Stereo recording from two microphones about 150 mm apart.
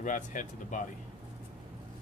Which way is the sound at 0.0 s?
55° left (ahead or behind).